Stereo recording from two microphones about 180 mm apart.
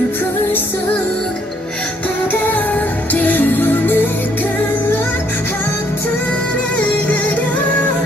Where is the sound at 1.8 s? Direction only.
10° left (ahead or behind).